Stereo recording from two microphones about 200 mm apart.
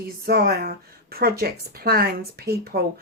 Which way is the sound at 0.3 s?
50° right (ahead or behind).